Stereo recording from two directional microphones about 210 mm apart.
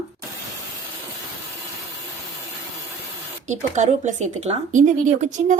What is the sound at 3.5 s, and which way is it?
Speech, 35° right (ahead or behind).